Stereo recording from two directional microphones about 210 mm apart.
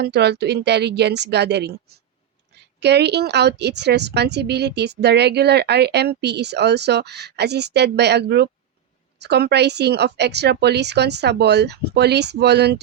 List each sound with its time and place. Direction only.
0.0 s a woman's voice: 50° right (ahead or behind)